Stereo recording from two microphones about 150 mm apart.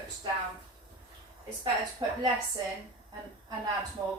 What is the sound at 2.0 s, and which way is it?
Speech, 30° right (ahead or behind).